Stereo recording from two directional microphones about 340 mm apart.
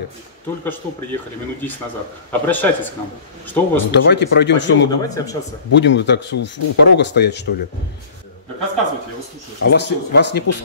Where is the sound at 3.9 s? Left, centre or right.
Left.